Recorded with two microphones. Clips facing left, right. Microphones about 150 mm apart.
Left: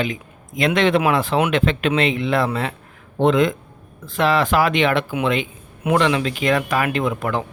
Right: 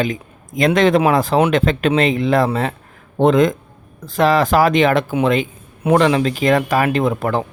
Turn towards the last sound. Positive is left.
turn(degrees=-40)  # may be behind; listen again after turning